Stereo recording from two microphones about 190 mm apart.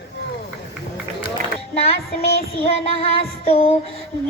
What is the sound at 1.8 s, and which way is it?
Child singing, 30° left (ahead or behind).